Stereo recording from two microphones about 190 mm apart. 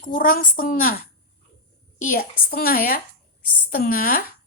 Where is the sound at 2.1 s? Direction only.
50° left (ahead or behind).